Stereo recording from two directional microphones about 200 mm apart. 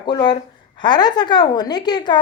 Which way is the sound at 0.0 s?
20° left (ahead or behind).